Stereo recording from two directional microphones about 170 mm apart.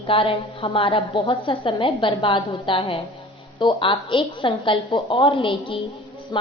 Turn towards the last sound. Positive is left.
turn(degrees=25)  # may be behind; listen again after turning